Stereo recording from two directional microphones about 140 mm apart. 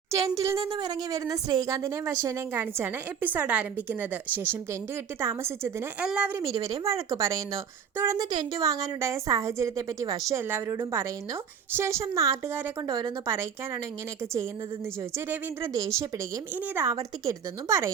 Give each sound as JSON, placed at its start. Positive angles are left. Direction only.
{"t": 0.1, "sound": "speech", "side_deg": -20}
{"t": 0.6, "sound": "a woman's voice", "side_deg": -35}
{"t": 6.5, "sound": "speech", "side_deg": -25}
{"t": 13.0, "sound": "speech", "side_deg": -30}
{"t": 15.1, "sound": "speech", "side_deg": -20}